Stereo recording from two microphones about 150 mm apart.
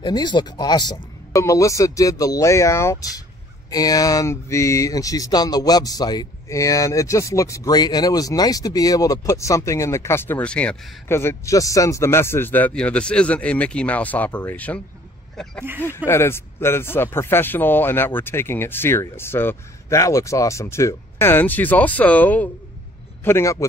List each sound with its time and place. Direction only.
0.0 s speech: 30° left (ahead or behind); by 14.8 s 10° left (ahead or behind)
16.1 s speech: 15° left (ahead or behind)